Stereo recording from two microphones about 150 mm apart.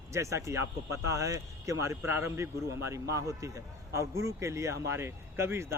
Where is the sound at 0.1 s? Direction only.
20° right (ahead or behind).